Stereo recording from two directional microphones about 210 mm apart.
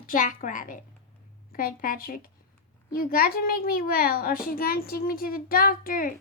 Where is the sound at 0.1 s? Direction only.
40° left (ahead or behind).